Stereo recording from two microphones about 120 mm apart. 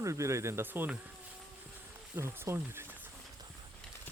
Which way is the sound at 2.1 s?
20° right (ahead or behind).